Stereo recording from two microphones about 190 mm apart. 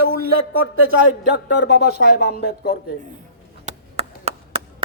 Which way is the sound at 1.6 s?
55° left (ahead or behind).